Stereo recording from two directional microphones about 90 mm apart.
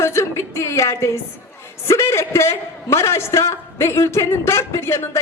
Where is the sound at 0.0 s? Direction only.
30° left (ahead or behind).